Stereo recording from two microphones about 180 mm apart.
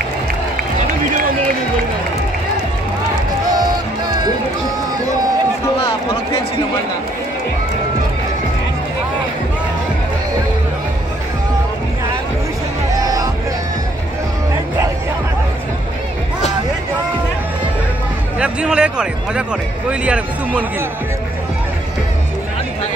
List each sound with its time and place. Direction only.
0.7 s run: 45° right (ahead or behind)
5.8 s a sound: 30° left (ahead or behind)
12.9 s music: 20° right (ahead or behind)
18.4 s speech: 5° right (ahead or behind)